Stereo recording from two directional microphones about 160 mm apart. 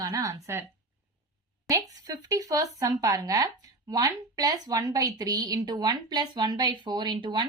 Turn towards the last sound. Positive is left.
turn(degrees=-30)  # may be behind; listen again after turning